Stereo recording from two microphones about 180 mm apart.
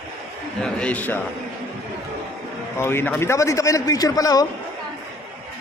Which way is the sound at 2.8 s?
10° left (ahead or behind).